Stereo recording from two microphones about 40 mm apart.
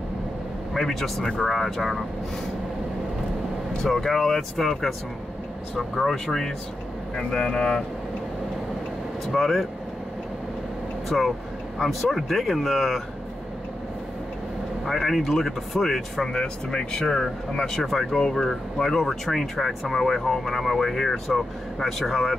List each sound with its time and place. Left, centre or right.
0.7 s speech: centre
3.9 s speech: centre
9.2 s speech: centre
11.1 s speech: centre
14.9 s speech: centre
16.3 s speech: centre